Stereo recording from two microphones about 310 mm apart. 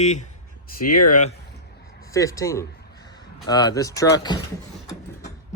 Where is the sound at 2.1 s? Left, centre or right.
Centre.